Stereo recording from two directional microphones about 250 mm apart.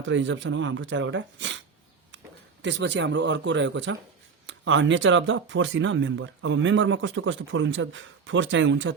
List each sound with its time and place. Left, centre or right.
0.0 s speech: right